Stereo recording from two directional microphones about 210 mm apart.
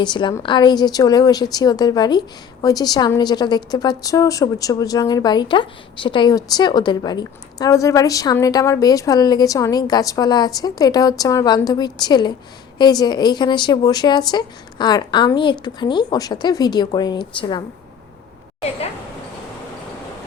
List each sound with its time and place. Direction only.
0.0 s a woman's voice: 20° left (ahead or behind)